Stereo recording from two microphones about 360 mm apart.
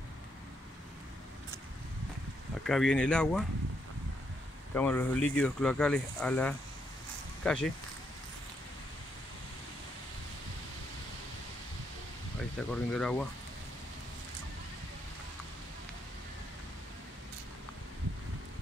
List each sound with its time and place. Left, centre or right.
2.6 s speech: centre
4.7 s speech: centre
12.5 s speech: centre